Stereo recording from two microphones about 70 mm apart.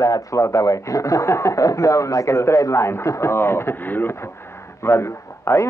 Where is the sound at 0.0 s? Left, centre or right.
Left.